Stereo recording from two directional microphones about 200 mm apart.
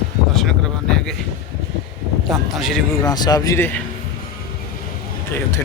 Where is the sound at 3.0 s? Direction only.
20° left (ahead or behind).